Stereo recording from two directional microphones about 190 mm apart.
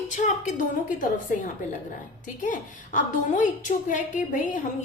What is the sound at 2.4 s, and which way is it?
A woman's voice, 40° left (ahead or behind).